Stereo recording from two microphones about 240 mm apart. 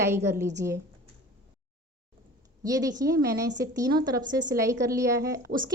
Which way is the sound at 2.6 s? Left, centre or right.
Centre.